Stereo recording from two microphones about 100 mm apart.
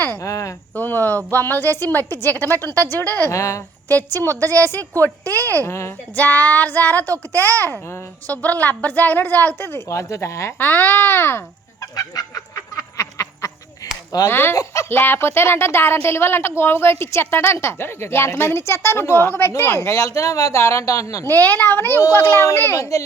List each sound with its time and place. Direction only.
0.2 s speech: 30° left (ahead or behind)
0.7 s a woman's voice: 20° left (ahead or behind)
2.9 s child singing: 20° left (ahead or behind)
3.3 s speech: 30° left (ahead or behind)
3.8 s a woman's voice: 20° left (ahead or behind)
6.1 s child singing: 15° left (ahead or behind)
7.1 s a woman's voice: 20° left (ahead or behind)
10.6 s a woman's voice: 20° left (ahead or behind)
11.8 s fowl: 35° left (ahead or behind)
13.0 s a sound: 30° left (ahead or behind)
14.3 s a woman's voice: 20° left (ahead or behind)
14.5 s speech: 35° left (ahead or behind)
14.8 s a woman's voice: 20° left (ahead or behind)
21.2 s a woman's voice: 20° left (ahead or behind)